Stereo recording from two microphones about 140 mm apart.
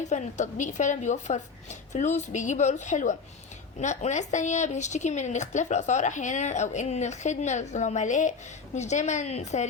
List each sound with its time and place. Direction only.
0.1 s speech: 60° left (ahead or behind)